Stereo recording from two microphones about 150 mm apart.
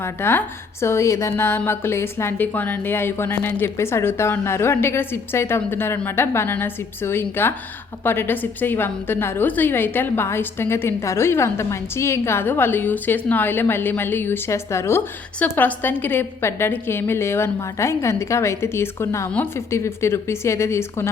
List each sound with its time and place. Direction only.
0.0 s a woman's voice: 15° left (ahead or behind)